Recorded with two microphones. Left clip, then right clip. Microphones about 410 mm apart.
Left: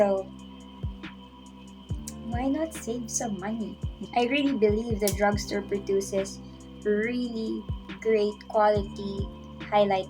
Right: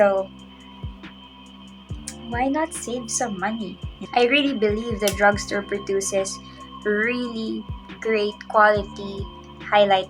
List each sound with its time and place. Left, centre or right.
2.0 s music: left
2.8 s speech: left